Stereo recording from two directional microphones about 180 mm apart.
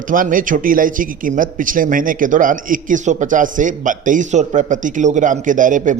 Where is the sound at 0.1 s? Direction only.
50° right (ahead or behind).